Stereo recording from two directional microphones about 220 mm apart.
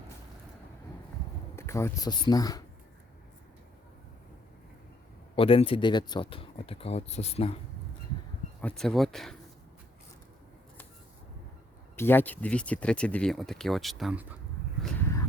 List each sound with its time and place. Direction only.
1.5 s speech: 10° left (ahead or behind)
5.4 s speech: 25° left (ahead or behind)
8.6 s speech: centre (ahead or behind)
11.9 s speech: 10° left (ahead or behind)
14.8 s a sound: 10° left (ahead or behind)